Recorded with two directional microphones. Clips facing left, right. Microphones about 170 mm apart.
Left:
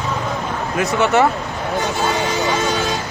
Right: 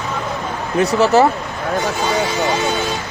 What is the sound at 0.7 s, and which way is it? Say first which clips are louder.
Speech: right 3 dB; 35° right (ahead or behind).